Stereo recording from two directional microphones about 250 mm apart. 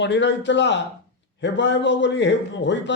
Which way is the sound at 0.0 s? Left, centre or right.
Left.